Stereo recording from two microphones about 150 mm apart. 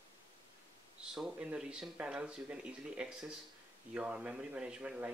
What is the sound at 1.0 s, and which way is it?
A man's voice, 5° right (ahead or behind).